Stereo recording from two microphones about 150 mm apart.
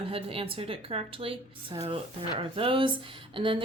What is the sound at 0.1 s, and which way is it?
Speech, 40° right (ahead or behind).